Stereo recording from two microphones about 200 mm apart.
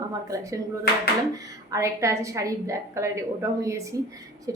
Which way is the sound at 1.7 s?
15° right (ahead or behind).